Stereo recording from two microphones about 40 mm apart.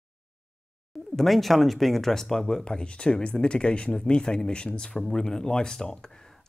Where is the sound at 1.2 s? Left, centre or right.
Centre.